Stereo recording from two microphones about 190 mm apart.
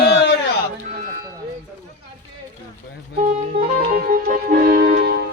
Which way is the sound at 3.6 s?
50° right (ahead or behind).